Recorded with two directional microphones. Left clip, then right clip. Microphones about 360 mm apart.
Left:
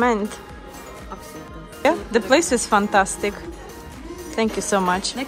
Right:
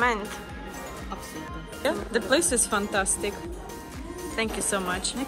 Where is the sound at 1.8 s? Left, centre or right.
Centre.